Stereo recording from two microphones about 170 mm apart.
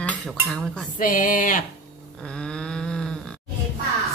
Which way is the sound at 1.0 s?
50° left (ahead or behind).